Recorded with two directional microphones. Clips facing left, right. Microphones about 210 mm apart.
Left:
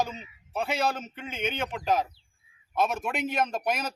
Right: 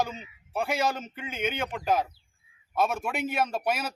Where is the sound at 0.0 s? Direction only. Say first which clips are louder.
Even; 10° right (ahead or behind).